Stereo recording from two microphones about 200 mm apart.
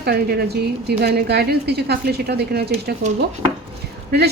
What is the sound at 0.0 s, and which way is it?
A woman's voice, 55° right (ahead or behind).